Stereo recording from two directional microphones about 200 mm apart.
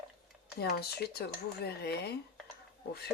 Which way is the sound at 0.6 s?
55° left (ahead or behind).